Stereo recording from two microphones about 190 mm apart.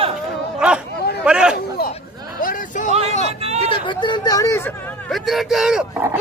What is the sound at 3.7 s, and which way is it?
Speech, 25° left (ahead or behind).